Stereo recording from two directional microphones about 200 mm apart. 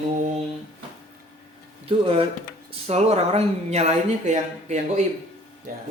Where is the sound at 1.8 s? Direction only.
30° right (ahead or behind).